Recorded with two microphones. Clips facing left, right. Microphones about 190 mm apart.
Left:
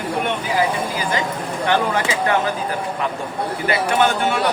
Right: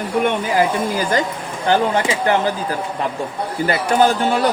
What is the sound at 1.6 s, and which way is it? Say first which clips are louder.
Speech: right 3 dB; 30° right (ahead or behind).